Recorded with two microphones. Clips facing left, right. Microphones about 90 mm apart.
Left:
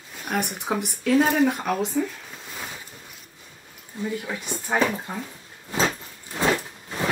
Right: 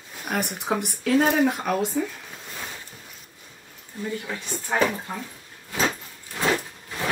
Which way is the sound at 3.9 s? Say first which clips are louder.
Left 1 dB; 20° left (ahead or behind).